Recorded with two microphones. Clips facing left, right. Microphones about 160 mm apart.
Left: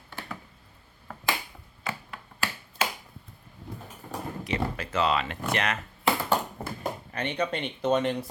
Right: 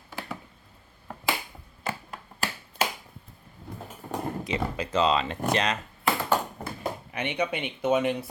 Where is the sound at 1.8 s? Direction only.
40° right (ahead or behind).